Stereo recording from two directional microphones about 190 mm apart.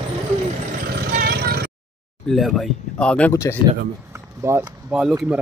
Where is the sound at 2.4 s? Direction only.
5° left (ahead or behind).